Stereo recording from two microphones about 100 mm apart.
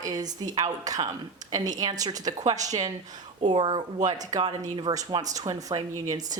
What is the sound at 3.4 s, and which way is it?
Speech, 55° right (ahead or behind).